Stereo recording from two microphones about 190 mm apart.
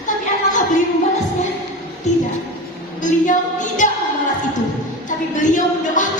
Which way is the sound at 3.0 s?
40° left (ahead or behind).